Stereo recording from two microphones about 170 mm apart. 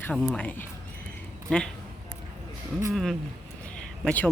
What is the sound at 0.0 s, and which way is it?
Speech, 5° left (ahead or behind).